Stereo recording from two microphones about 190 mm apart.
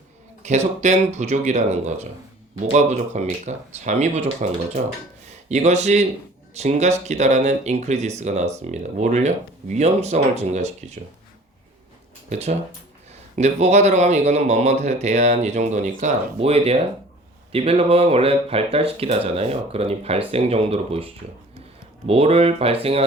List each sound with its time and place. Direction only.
0.4 s speech: 35° right (ahead or behind)
12.3 s speech: 35° right (ahead or behind)